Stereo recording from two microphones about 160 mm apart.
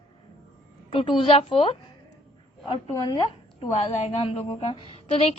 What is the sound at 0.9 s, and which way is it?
A woman's voice, 35° left (ahead or behind).